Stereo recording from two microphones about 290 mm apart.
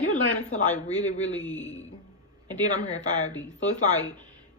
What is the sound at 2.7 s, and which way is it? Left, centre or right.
Speech, left.